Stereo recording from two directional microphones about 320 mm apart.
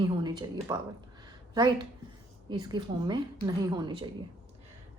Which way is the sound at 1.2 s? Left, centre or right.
Centre.